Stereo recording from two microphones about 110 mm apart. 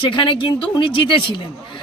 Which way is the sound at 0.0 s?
50° left (ahead or behind).